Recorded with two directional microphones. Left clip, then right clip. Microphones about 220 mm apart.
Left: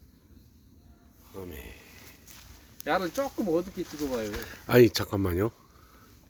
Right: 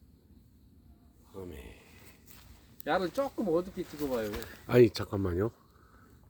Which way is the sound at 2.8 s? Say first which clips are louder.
Left 2 dB; 15° right (ahead or behind).